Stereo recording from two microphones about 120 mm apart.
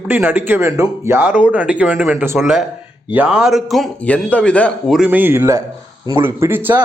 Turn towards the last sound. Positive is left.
turn(degrees=-20)  # may be behind; listen again after turning